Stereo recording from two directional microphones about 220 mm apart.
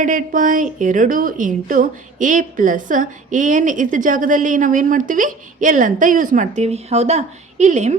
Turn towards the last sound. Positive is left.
turn(degrees=-30)  # may be behind; listen again after turning